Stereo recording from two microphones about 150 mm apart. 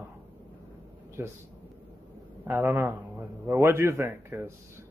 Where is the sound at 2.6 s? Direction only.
15° right (ahead or behind).